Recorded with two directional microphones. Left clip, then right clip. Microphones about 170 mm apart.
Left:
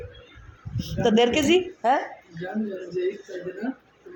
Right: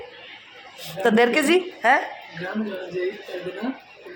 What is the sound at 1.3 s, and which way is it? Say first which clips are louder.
Speech: right 1 dB; 20° left (ahead or behind).